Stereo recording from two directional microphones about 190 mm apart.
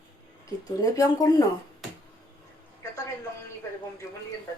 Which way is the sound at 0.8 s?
20° left (ahead or behind).